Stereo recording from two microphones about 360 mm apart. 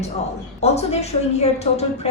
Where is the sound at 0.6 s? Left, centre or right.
Centre.